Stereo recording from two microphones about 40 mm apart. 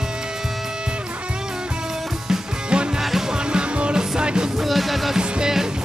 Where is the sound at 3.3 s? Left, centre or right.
Right.